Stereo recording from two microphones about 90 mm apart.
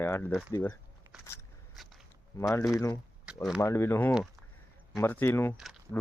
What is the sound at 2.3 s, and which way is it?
Speech, 30° left (ahead or behind).